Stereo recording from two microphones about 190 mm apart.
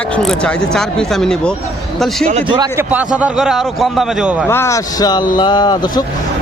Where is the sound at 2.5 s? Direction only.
20° right (ahead or behind).